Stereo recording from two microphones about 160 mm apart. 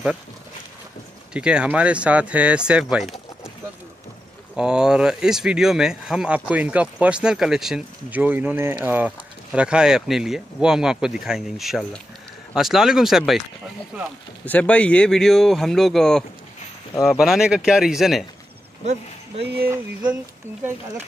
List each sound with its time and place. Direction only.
1.3 s speech: 5° right (ahead or behind)
4.6 s speech: 5° right (ahead or behind)
14.4 s speech: 10° left (ahead or behind)
19.4 s speech: 85° right
19.7 s speech: 5° right (ahead or behind)